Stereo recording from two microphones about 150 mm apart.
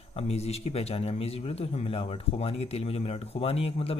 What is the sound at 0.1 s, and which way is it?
A man's voice, 45° left (ahead or behind).